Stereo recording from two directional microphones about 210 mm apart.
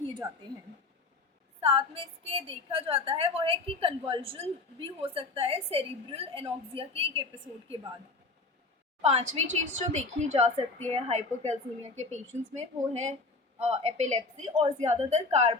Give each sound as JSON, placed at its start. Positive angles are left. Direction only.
{"t": 1.6, "sound": "a woman's voice", "side_deg": -25}
{"t": 9.0, "sound": "a woman's voice", "side_deg": -30}